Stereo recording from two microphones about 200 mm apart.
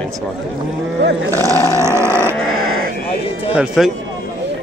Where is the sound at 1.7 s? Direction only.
15° right (ahead or behind).